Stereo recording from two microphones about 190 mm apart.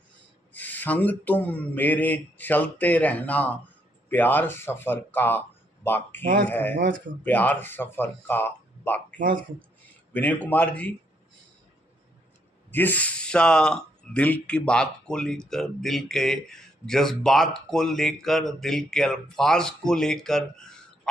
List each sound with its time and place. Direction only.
0.5 s speech: 10° left (ahead or behind)
6.7 s speech: 75° right (ahead or behind)
7.3 s speech: 10° left (ahead or behind)
9.1 s speech: 45° right (ahead or behind)
10.1 s speech: 10° left (ahead or behind)
12.7 s speech: 10° left (ahead or behind)